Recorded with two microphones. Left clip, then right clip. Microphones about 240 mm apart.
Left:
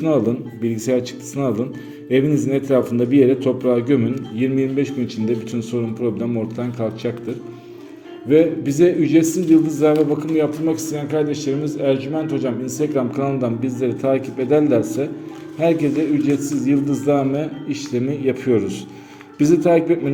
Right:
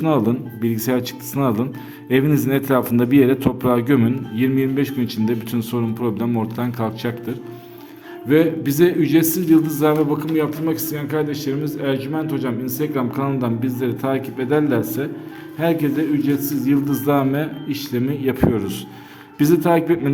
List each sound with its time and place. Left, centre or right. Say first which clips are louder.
0.1 s a man's voice: left 2 dB; centre
8.3 s a man's voice: left 1 dB; right